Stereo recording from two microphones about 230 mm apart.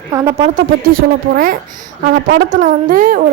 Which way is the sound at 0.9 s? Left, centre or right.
Right.